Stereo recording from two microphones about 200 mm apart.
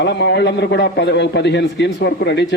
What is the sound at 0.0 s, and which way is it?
A man's voice, 60° left (ahead or behind).